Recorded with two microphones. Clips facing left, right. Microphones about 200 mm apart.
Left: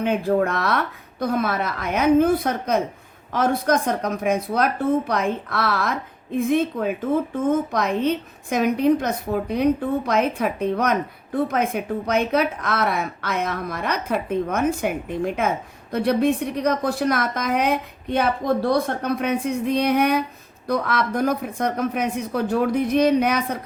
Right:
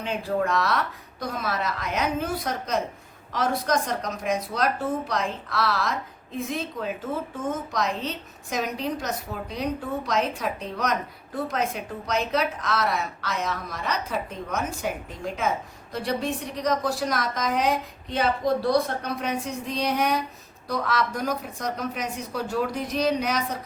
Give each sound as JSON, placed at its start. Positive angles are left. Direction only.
{"t": 0.0, "sound": "a woman's voice", "side_deg": 55}